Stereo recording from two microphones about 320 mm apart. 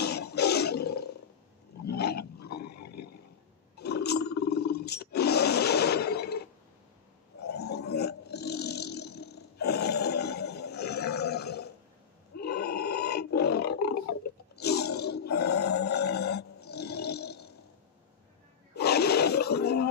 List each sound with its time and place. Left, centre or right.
0.0 s toilet flush: left
1.8 s roaring cats: left
2.4 s a sound: left
3.8 s roar: left
7.4 s burping: left
12.4 s roar: left
18.7 s wild animals: left